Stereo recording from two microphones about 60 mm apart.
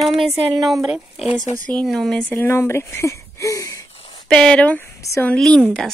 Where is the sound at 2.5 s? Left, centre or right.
Left.